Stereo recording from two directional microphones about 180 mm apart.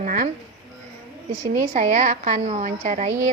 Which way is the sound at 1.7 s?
45° right (ahead or behind).